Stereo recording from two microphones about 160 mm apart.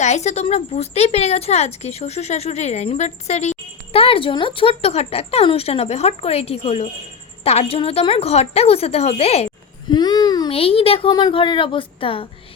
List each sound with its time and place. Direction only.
0.0 s a woman's voice: 45° left (ahead or behind)
9.9 s child singing: 25° left (ahead or behind)
10.5 s a woman's voice: 35° left (ahead or behind)